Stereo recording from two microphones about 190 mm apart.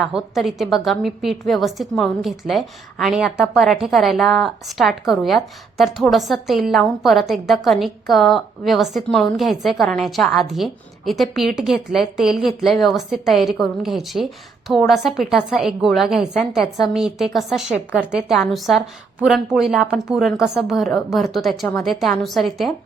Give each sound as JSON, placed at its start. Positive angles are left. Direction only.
{"t": 0.0, "sound": "a woman's voice", "side_deg": 0}